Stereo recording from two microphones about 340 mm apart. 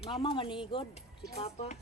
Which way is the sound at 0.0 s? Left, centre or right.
Centre.